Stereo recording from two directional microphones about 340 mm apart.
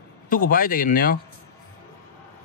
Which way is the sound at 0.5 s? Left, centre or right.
Left.